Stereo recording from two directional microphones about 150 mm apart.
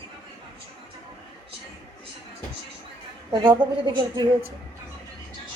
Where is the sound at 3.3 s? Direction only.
30° right (ahead or behind).